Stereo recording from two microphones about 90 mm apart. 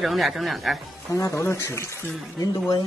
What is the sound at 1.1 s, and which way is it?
Speech, 30° left (ahead or behind).